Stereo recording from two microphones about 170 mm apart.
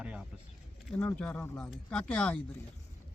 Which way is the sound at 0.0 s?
5° right (ahead or behind).